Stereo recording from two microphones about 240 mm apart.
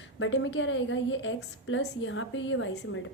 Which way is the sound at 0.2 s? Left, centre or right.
Left.